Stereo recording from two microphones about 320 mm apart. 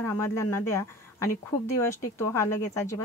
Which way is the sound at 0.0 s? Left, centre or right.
Centre.